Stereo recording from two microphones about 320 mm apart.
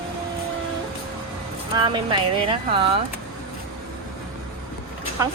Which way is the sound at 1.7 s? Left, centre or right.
Centre.